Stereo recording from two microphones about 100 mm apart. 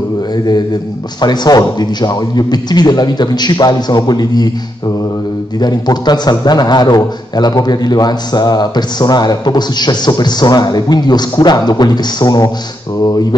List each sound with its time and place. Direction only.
1.2 s a man's voice: 45° left (ahead or behind)